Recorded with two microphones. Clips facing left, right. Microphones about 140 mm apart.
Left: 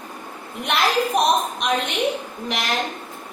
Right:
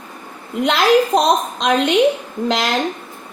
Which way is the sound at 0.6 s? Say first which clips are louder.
Right 7 dB; 90° right.